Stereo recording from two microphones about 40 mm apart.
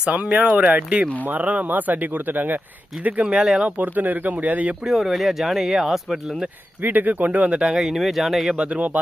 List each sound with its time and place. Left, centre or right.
0.0 s speech: right
0.3 s speech: right
1.2 s speech: right
3.2 s speech: right
3.8 s speech: right
4.9 s speech: centre
6.8 s speech: right
7.5 s speech: right
7.8 s speech: centre
8.5 s speech: right